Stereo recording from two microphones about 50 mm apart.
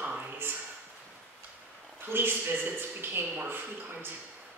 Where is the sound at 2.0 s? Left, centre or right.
Right.